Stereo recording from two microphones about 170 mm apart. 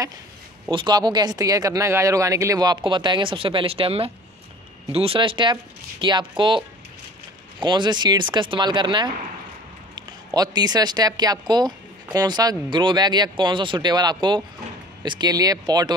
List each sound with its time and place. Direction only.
0.7 s speech: 25° right (ahead or behind)
7.6 s speech: 25° right (ahead or behind)